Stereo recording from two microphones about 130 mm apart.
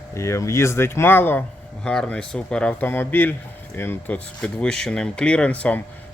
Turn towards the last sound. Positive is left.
turn(degrees=10)  # may be behind; listen again after turning